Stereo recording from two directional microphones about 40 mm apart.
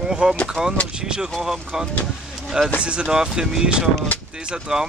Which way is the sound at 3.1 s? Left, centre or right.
Centre.